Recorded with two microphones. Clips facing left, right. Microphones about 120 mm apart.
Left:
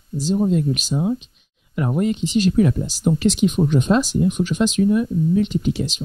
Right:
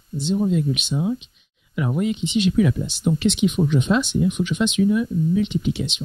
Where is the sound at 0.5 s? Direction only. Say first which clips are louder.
Left 2 dB; 40° left (ahead or behind).